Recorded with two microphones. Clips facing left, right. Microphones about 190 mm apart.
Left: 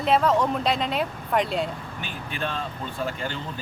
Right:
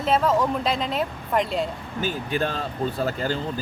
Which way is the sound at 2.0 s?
40° right (ahead or behind).